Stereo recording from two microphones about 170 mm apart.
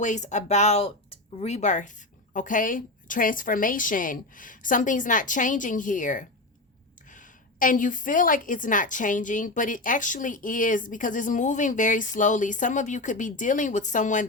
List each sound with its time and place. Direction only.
0.0 s a woman's voice: 45° left (ahead or behind)